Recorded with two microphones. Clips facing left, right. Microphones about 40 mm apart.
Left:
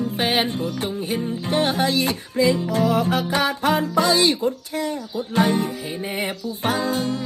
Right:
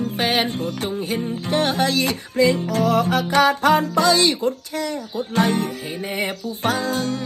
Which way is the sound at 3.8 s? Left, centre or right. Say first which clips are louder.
Right 1 dB; left.